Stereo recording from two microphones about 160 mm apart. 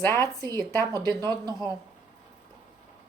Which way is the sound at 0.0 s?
15° left (ahead or behind).